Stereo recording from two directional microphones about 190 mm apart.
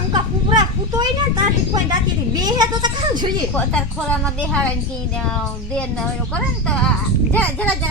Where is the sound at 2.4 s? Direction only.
20° right (ahead or behind).